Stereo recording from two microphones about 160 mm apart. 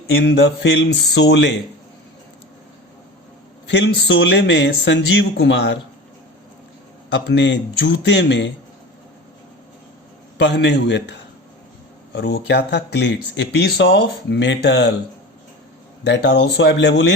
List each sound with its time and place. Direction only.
0.2 s speech: 90° left
3.7 s speech: 90° left
7.1 s speech: 90° left
10.3 s speech: 90° left
12.2 s speech: 90° left
16.0 s speech: 90° left